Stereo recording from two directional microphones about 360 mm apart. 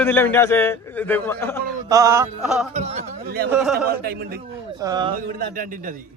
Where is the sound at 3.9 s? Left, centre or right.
Right.